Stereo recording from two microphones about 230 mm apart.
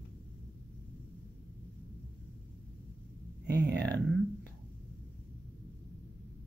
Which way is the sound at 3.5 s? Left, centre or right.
Right.